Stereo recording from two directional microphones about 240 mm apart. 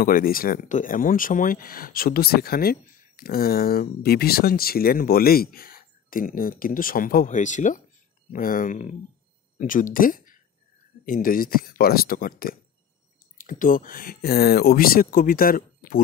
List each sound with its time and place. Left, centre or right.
0.0 s speech: left